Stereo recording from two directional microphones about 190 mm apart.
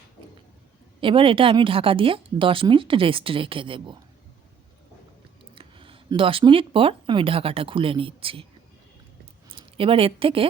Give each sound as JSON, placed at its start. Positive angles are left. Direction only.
{"t": 1.0, "sound": "speech", "side_deg": -30}
{"t": 5.5, "sound": "speech", "side_deg": -25}
{"t": 9.5, "sound": "speech", "side_deg": -30}